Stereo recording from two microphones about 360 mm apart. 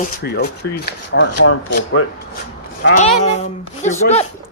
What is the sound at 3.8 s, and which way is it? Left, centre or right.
Speech, centre.